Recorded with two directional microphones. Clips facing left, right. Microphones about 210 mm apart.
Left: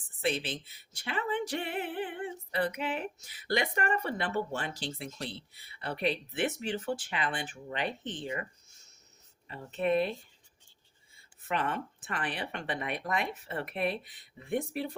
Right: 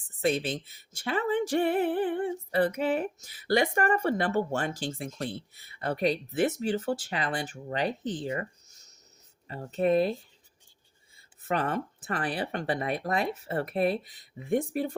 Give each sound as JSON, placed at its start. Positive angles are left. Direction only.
{"t": 0.2, "sound": "speech", "side_deg": -45}
{"t": 9.5, "sound": "speech", "side_deg": -40}
{"t": 11.4, "sound": "speech", "side_deg": -40}